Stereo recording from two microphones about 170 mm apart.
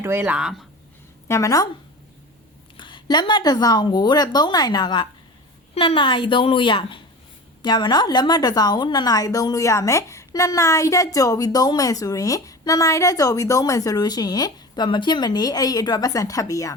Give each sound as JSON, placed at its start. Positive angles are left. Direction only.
{"t": 0.0, "sound": "speech", "side_deg": -15}
{"t": 1.3, "sound": "a woman's voice", "side_deg": 20}
{"t": 2.7, "sound": "a woman's voice", "side_deg": 25}